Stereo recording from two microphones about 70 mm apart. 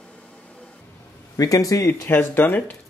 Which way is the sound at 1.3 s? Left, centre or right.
Left.